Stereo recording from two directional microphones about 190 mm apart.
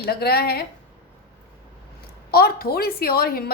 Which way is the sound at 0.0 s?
55° left (ahead or behind).